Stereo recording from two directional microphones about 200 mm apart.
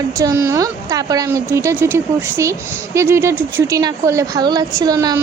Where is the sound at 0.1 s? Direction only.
15° right (ahead or behind).